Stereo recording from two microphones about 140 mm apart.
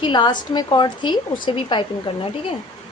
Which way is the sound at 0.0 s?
35° left (ahead or behind).